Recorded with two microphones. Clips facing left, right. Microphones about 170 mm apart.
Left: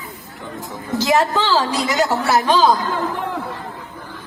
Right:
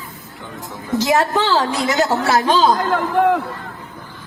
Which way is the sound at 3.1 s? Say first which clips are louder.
Right 10 dB; 60° right (ahead or behind).